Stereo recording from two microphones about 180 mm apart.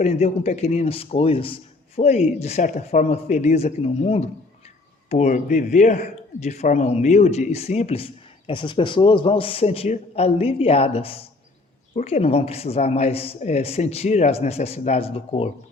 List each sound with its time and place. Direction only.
0.0 s speech: 40° left (ahead or behind)